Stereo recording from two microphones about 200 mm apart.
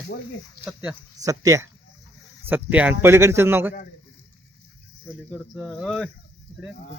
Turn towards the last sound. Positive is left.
turn(degrees=5)  # may be behind; listen again after turning